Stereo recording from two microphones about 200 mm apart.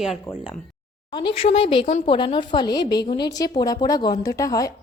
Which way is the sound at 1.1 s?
25° left (ahead or behind).